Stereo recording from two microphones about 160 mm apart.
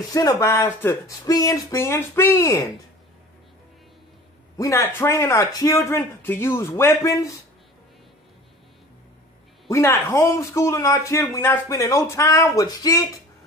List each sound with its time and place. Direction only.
0.0 s speech: 25° left (ahead or behind)
4.6 s speech: 20° left (ahead or behind)
9.7 s a man's voice: 15° left (ahead or behind)